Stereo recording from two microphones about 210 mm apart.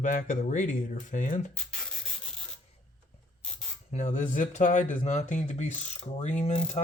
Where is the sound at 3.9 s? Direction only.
35° left (ahead or behind).